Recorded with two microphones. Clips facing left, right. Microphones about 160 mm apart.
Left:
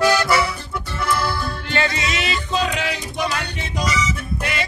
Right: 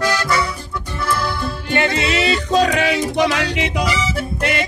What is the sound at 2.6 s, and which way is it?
Music, 70° right (ahead or behind).